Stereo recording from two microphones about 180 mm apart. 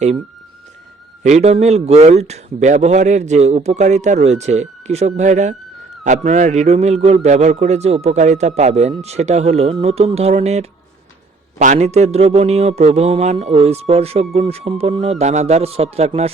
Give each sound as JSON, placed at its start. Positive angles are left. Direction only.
{"t": 1.2, "sound": "a man's voice", "side_deg": -40}